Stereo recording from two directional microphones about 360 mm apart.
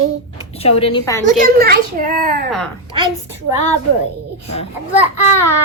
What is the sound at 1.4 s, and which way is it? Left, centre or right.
A child's voice, right.